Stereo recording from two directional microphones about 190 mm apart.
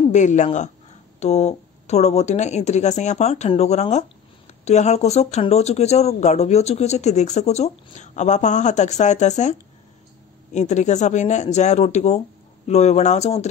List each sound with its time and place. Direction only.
0.1 s speech: 40° left (ahead or behind)